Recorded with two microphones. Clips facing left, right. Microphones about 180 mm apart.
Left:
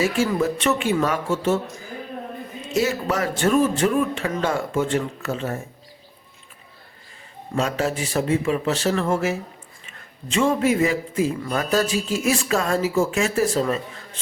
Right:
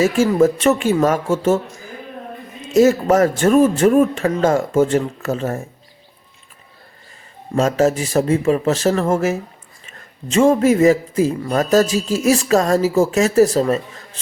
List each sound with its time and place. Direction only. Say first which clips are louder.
0.0 s speech: right 7 dB; 45° right (ahead or behind)
2.7 s speech: right 10 dB; 45° right (ahead or behind)
7.5 s a man's voice: right 7 dB; 45° right (ahead or behind)